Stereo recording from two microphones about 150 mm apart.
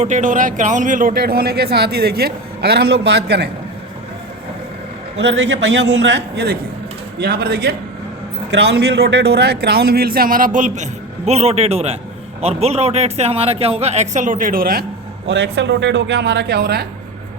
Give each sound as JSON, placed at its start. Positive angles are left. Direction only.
{"t": 0.0, "sound": "a man's voice", "side_deg": -55}
{"t": 6.3, "sound": "a man's voice", "side_deg": -90}
{"t": 11.3, "sound": "a man's voice", "side_deg": -45}
{"t": 15.4, "sound": "a man's voice", "side_deg": -90}